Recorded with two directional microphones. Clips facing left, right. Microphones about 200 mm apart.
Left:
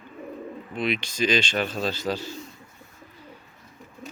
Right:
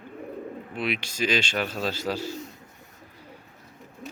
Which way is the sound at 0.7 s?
10° right (ahead or behind).